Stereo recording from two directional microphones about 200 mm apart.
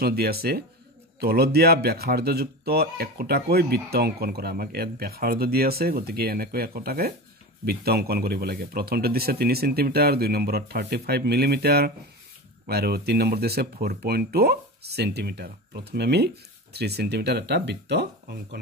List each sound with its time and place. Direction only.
0.0 s speech: 50° right (ahead or behind)